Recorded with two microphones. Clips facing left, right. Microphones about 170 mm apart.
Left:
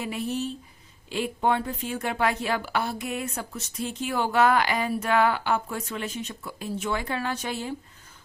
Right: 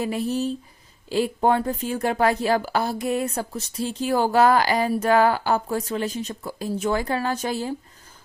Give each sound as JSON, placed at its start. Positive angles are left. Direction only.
{"t": 0.0, "sound": "speech", "side_deg": -35}